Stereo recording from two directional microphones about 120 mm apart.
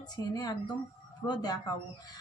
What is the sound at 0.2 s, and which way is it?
Speech, 30° left (ahead or behind).